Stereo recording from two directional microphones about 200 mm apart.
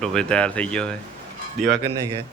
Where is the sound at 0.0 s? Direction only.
5° left (ahead or behind).